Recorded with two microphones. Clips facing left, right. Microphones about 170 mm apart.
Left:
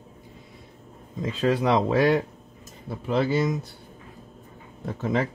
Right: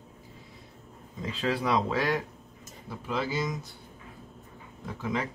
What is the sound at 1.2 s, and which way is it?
Speech, 50° left (ahead or behind).